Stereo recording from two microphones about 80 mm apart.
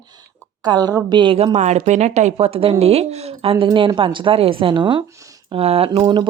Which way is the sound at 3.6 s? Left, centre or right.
Right.